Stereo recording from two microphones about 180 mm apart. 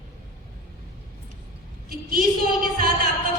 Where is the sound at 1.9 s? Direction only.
55° right (ahead or behind).